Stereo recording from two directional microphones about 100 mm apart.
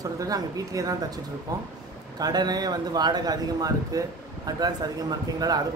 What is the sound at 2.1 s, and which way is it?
Speech, 40° right (ahead or behind).